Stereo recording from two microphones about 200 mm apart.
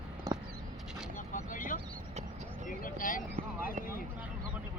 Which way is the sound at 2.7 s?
45° left (ahead or behind).